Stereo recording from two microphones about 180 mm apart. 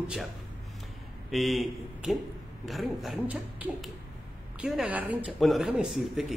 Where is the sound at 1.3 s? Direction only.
Centre (ahead or behind).